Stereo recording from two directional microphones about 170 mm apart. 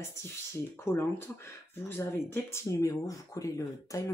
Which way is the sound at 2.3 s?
20° left (ahead or behind).